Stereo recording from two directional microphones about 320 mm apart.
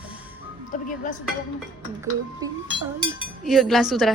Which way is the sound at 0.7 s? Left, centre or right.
Left.